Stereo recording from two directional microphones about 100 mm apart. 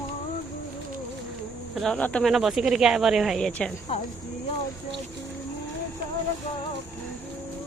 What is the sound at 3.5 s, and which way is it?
Speech, 10° left (ahead or behind).